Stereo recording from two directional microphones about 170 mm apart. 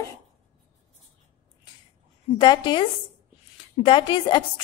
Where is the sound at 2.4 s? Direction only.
25° left (ahead or behind).